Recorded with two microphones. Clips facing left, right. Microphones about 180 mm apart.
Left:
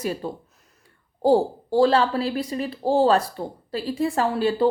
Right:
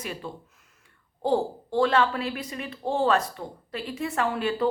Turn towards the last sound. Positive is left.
turn(degrees=30)  # may be behind; listen again after turning